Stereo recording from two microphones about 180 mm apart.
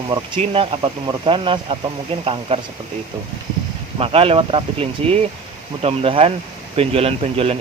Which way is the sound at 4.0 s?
30° right (ahead or behind).